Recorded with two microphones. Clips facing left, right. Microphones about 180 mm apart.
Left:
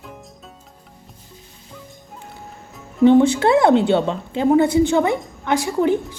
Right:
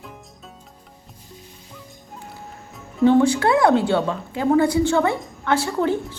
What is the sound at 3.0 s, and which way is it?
A woman's voice, 20° left (ahead or behind).